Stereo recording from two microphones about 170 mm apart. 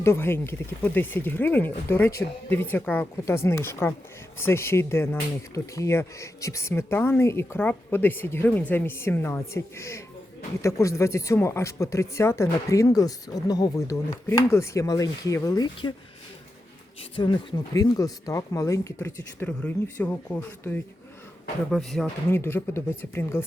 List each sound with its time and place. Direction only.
0.0 s speech: 15° left (ahead or behind)
17.0 s speech: 30° left (ahead or behind); by 22.1 s centre (ahead or behind)
22.3 s speech: 15° left (ahead or behind)